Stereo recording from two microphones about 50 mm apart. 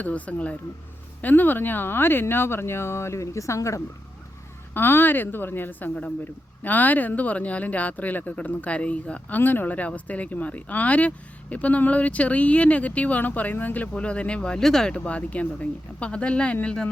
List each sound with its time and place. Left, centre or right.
0.0 s speech: left
1.2 s speech: left
4.7 s a woman's voice: left
9.4 s speech: left; by 14.9 s centre
14.9 s speech: left